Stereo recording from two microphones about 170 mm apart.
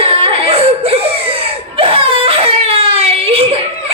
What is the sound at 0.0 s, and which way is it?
Whimper, 30° right (ahead or behind).